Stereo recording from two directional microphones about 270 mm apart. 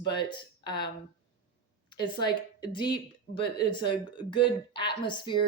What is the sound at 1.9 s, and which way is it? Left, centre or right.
Speech, centre.